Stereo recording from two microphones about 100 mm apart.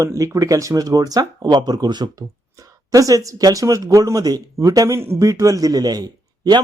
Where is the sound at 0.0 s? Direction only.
30° right (ahead or behind).